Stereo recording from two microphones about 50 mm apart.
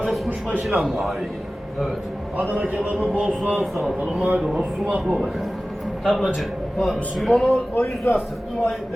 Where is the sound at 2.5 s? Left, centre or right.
Right.